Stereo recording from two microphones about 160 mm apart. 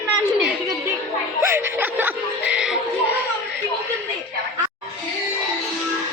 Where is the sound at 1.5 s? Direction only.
15° right (ahead or behind).